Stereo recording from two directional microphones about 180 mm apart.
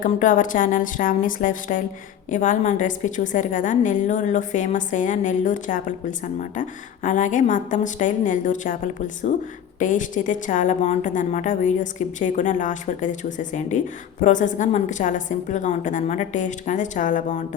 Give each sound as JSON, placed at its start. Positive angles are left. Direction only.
{"t": 0.0, "sound": "a woman's voice", "side_deg": 50}